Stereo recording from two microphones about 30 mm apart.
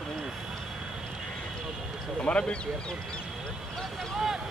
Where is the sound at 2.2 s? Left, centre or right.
Left.